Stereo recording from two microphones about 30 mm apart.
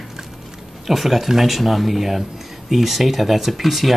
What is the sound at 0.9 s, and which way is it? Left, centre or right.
Speech, centre.